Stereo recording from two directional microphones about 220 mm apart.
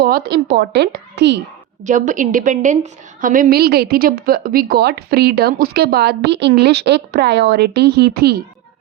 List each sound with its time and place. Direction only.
0.0 s a woman's voice: 45° right (ahead or behind)
1.8 s a woman's voice: 35° right (ahead or behind)